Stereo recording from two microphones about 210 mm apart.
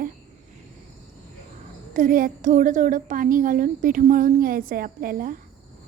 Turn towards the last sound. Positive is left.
turn(degrees=-45)  # may be behind; listen again after turning